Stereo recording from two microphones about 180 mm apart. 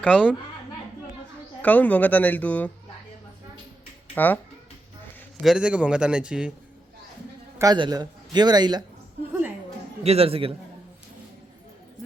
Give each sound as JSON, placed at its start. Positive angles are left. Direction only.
{"t": 0.0, "sound": "speech", "side_deg": 10}
{"t": 1.6, "sound": "speech", "side_deg": 10}
{"t": 4.1, "sound": "speech", "side_deg": 10}
{"t": 5.4, "sound": "a man's voice", "side_deg": -5}
{"t": 7.6, "sound": "a man's voice", "side_deg": -20}
{"t": 10.0, "sound": "a man's voice", "side_deg": -35}